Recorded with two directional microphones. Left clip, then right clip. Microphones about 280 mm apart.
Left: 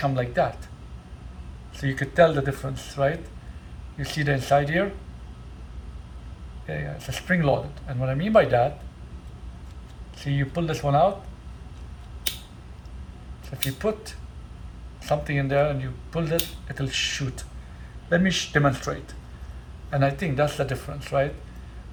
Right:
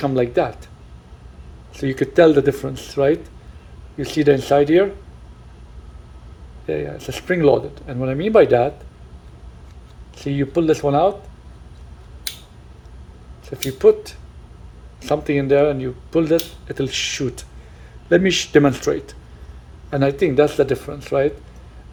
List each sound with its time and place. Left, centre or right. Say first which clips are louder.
0.0 s speech: right 5 dB; right
1.7 s speech: right 7 dB; right
6.7 s speech: right 9 dB; right
10.2 s speech: right 9 dB; right
13.5 s speech: right 13 dB; right